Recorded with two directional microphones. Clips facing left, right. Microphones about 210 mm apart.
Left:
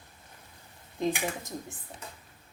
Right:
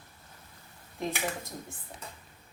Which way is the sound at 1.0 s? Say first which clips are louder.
Left 3 dB; 20° left (ahead or behind).